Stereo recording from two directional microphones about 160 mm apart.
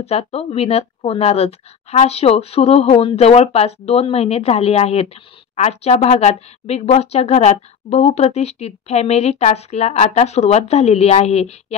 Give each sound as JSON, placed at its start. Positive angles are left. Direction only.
{"t": 0.0, "sound": "speech", "side_deg": 40}